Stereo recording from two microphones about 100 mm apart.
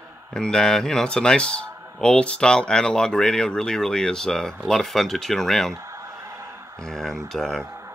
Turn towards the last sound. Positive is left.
turn(degrees=5)  # may be behind; listen again after turning